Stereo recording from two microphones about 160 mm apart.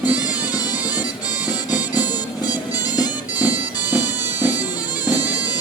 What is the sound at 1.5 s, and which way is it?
Music, 10° right (ahead or behind).